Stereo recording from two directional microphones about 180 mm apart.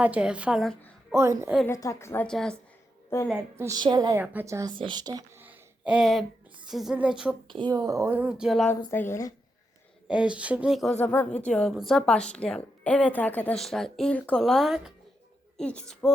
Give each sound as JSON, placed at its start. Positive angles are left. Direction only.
{"t": 0.0, "sound": "speech", "side_deg": -5}
{"t": 1.1, "sound": "speech", "side_deg": -15}
{"t": 1.6, "sound": "a woman's voice", "side_deg": 15}
{"t": 3.1, "sound": "a woman's voice", "side_deg": 15}
{"t": 3.6, "sound": "a woman's voice", "side_deg": -20}
{"t": 4.2, "sound": "a woman's voice", "side_deg": -10}
{"t": 5.4, "sound": "a sound", "side_deg": -10}
{"t": 6.7, "sound": "speech", "side_deg": 0}
{"t": 7.4, "sound": "speech", "side_deg": -25}
{"t": 8.7, "sound": "a woman's voice", "side_deg": 15}
{"t": 10.1, "sound": "speech", "side_deg": -5}
{"t": 11.0, "sound": "speech", "side_deg": 10}